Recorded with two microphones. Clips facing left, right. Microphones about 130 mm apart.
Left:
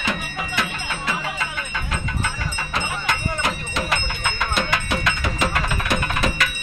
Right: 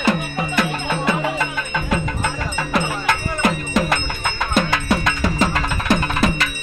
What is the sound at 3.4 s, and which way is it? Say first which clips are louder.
Music: right 6 dB; 55° right (ahead or behind).